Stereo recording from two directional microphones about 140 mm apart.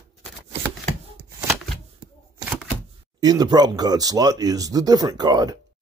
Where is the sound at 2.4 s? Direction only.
5° right (ahead or behind).